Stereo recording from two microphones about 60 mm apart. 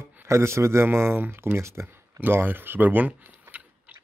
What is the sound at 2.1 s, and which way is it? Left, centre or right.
Speech, right.